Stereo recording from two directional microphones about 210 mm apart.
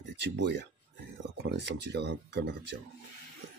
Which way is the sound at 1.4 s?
55° right (ahead or behind).